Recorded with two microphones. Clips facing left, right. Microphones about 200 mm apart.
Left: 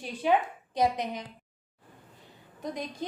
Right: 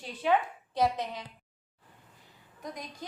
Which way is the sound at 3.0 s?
25° left (ahead or behind).